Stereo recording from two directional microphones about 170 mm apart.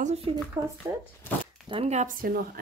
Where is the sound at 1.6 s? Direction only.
35° right (ahead or behind); by 2.5 s 60° right (ahead or behind).